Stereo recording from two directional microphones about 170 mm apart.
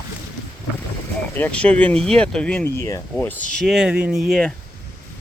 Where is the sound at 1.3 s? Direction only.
10° left (ahead or behind).